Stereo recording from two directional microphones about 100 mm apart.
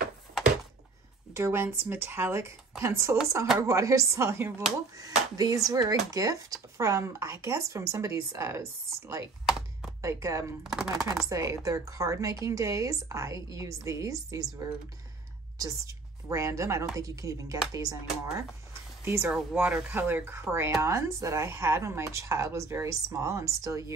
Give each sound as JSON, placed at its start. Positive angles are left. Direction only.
{"t": 1.3, "sound": "speech", "side_deg": -25}
{"t": 4.9, "sound": "speech", "side_deg": -35}
{"t": 10.0, "sound": "speech", "side_deg": -30}
{"t": 10.6, "sound": "chopping", "side_deg": -5}
{"t": 11.2, "sound": "a woman's voice", "side_deg": -30}